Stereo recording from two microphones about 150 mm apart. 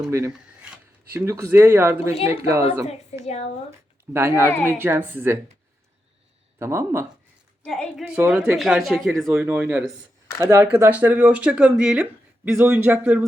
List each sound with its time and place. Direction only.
1.1 s speech: 20° right (ahead or behind)
3.1 s speech: 45° left (ahead or behind)
3.7 s speech: 15° right (ahead or behind)
6.6 s speech: 15° right (ahead or behind)
7.6 s a woman's voice: 5° left (ahead or behind)
9.2 s speech: 10° right (ahead or behind)